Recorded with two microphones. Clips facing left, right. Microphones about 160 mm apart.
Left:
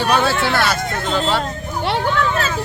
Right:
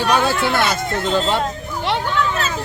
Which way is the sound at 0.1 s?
15° right (ahead or behind).